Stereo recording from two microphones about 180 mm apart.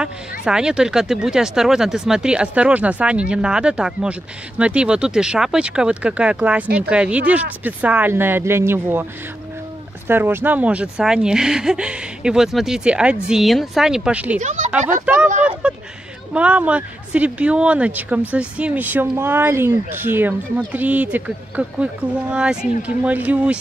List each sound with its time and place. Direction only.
0.0 s speech: 5° right (ahead or behind)
10.0 s speech: 10° right (ahead or behind)
14.4 s speech: 40° right (ahead or behind)
16.3 s speech: 5° right (ahead or behind)